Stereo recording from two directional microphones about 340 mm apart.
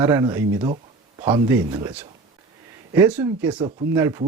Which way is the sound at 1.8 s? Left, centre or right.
Centre.